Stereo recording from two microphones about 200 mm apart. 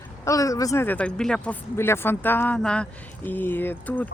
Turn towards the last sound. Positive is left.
turn(degrees=10)  # may be behind; listen again after turning